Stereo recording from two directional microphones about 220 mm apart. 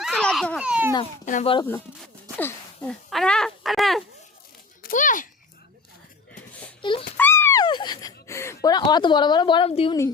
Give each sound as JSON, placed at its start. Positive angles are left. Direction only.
{"t": 0.0, "sound": "a child's voice", "side_deg": 5}
{"t": 1.2, "sound": "speech", "side_deg": 35}
{"t": 2.4, "sound": "speech", "side_deg": 0}
{"t": 4.8, "sound": "speech", "side_deg": 40}
{"t": 6.8, "sound": "speech", "side_deg": 20}
{"t": 7.2, "sound": "speech", "side_deg": 10}